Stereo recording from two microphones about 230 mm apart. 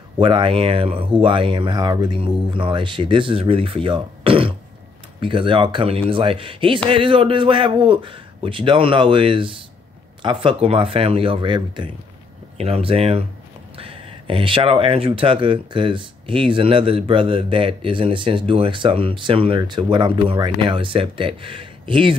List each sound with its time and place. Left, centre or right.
0.2 s speech: right